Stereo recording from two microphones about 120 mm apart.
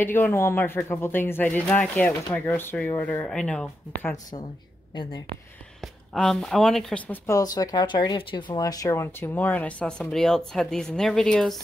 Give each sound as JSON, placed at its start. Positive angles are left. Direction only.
{"t": 0.0, "sound": "speech", "side_deg": 15}
{"t": 5.8, "sound": "speech", "side_deg": 5}
{"t": 7.1, "sound": "speech", "side_deg": 25}